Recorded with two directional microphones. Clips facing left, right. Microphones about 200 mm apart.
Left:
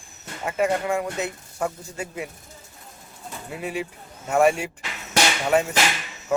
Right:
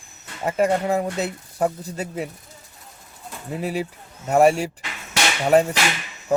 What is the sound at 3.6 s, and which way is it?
Speech, 40° right (ahead or behind).